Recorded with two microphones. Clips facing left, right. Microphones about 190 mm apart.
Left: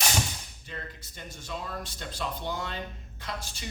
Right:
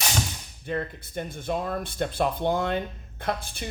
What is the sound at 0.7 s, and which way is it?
Speech, 55° right (ahead or behind).